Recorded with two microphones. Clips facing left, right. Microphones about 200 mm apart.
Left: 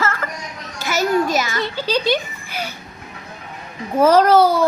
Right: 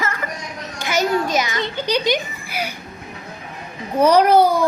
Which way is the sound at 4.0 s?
15° right (ahead or behind).